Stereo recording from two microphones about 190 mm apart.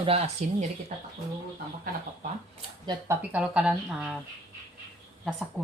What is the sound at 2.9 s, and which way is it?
A woman's voice, 10° right (ahead or behind).